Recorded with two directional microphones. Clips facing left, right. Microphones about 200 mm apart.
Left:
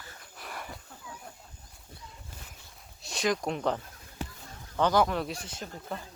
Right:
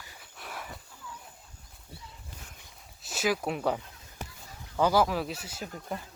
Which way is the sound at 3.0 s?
5° right (ahead or behind).